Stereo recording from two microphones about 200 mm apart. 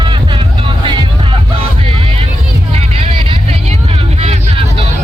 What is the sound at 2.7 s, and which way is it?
Vehicle, 30° right (ahead or behind).